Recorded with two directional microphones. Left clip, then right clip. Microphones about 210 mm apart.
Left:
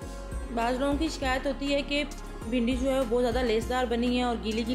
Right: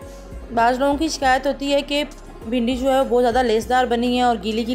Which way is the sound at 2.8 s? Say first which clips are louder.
Right 11 dB; 25° right (ahead or behind).